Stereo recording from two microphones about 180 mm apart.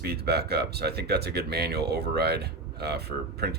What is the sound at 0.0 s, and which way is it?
Speech, 60° right (ahead or behind).